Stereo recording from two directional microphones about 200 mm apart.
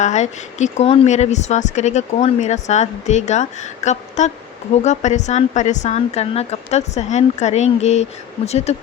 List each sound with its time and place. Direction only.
0.0 s speech: 35° left (ahead or behind)